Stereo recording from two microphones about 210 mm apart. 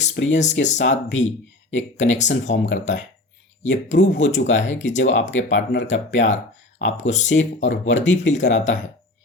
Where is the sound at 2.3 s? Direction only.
60° left (ahead or behind).